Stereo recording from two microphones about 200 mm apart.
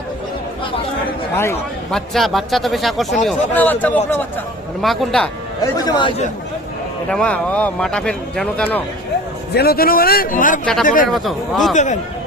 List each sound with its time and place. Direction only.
1.4 s a man's voice: 10° left (ahead or behind)
2.0 s speech: centre (ahead or behind)
5.7 s a man's voice: 20° left (ahead or behind)
7.1 s speech: 5° left (ahead or behind)
9.5 s a man's voice: 50° left (ahead or behind)
11.1 s speech: centre (ahead or behind)
11.7 s a man's voice: 35° left (ahead or behind)